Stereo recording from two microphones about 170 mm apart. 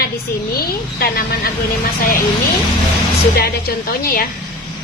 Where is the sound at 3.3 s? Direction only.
65° left (ahead or behind).